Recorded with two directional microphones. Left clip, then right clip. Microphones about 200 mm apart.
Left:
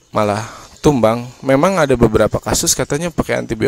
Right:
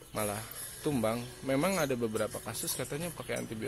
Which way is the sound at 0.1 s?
50° left (ahead or behind).